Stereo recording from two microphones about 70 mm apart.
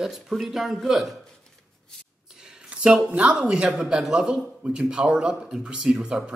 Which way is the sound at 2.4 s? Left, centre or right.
Centre.